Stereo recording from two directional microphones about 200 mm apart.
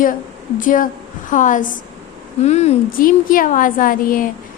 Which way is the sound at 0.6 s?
40° left (ahead or behind).